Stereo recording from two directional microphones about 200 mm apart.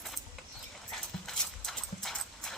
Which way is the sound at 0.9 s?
Centre (ahead or behind).